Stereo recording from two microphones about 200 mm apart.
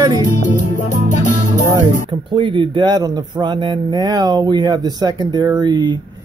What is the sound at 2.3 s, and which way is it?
Speech, 25° right (ahead or behind).